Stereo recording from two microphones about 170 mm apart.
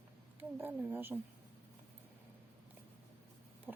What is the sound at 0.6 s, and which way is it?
Speech, 10° right (ahead or behind).